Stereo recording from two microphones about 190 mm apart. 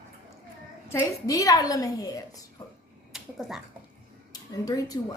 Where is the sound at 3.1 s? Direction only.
Centre (ahead or behind).